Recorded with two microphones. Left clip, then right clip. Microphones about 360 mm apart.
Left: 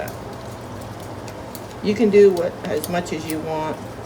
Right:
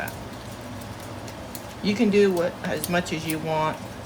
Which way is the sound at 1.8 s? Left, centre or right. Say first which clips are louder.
Left 7 dB; centre.